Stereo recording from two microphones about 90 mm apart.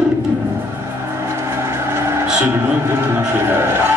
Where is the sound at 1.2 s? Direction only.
30° right (ahead or behind).